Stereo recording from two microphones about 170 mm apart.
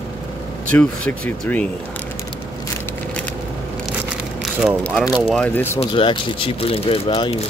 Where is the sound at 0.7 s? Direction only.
5° left (ahead or behind).